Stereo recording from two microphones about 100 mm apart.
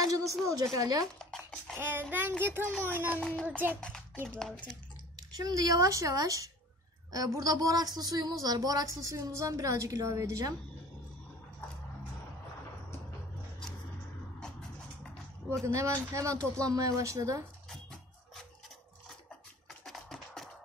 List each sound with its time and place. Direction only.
0.1 s a woman's voice: 35° right (ahead or behind)
1.3 s a sound: 5° left (ahead or behind)
1.8 s child singing: 20° right (ahead or behind)
3.2 s speech: 5° left (ahead or behind)
3.4 s a child's voice: 20° right (ahead or behind)
3.8 s a sound: 10° left (ahead or behind)
4.3 s speech: 10° left (ahead or behind)
5.3 s a woman's voice: 40° right (ahead or behind)
15.6 s a woman's voice: 30° right (ahead or behind)
19.8 s music: 5° left (ahead or behind)